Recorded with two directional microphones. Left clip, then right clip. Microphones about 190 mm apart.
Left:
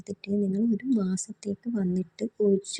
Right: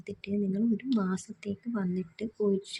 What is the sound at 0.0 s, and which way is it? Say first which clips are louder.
A woman's voice: left 4 dB; 20° left (ahead or behind).